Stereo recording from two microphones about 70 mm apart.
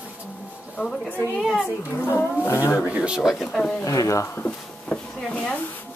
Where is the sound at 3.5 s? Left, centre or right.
Centre.